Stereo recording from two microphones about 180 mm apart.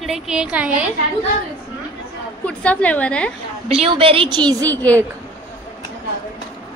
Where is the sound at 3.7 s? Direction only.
30° right (ahead or behind).